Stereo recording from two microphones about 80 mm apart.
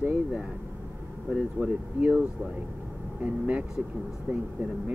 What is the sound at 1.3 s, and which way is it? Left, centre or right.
Speech, centre.